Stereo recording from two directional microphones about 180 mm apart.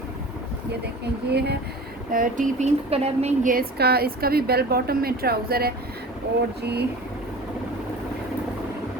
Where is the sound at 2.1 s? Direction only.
50° right (ahead or behind).